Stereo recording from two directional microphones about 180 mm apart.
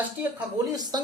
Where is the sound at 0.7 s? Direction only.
20° right (ahead or behind).